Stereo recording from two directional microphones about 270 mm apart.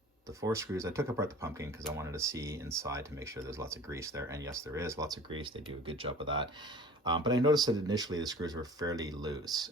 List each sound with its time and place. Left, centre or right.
0.4 s speech: centre